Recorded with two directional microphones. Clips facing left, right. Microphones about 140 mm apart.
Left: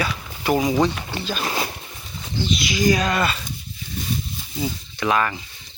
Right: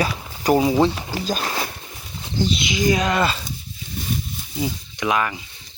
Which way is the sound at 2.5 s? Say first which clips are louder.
Left 2 dB; 20° right (ahead or behind).